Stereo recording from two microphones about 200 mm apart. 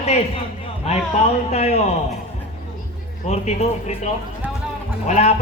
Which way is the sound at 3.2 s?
35° left (ahead or behind).